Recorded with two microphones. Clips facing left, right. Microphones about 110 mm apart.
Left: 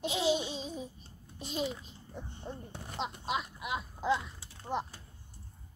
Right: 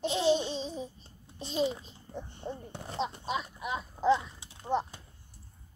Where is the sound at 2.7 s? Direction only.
25° right (ahead or behind).